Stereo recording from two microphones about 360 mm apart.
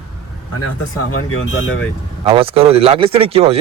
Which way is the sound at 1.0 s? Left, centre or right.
Left.